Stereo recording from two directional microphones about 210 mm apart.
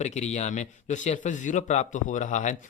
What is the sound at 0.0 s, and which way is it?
A man's voice, 35° left (ahead or behind).